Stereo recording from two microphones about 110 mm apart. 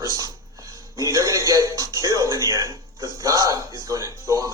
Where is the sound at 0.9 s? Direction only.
30° right (ahead or behind).